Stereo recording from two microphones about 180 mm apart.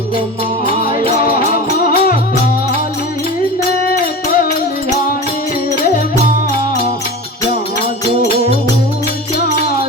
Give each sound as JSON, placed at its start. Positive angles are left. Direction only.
{"t": 0.8, "sound": "music", "side_deg": 55}
{"t": 3.8, "sound": "music", "side_deg": 55}
{"t": 5.7, "sound": "music", "side_deg": 55}